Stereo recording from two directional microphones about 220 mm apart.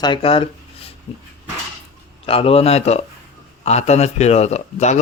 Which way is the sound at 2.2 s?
25° left (ahead or behind).